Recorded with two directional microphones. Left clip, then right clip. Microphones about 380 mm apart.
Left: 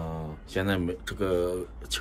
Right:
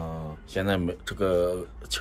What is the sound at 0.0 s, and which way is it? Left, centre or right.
Speech, centre.